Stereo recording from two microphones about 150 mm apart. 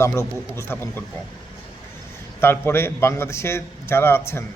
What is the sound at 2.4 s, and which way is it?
A man's voice, 15° left (ahead or behind).